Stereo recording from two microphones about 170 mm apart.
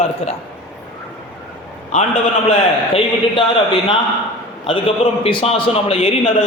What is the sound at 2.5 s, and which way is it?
Speech, 35° left (ahead or behind).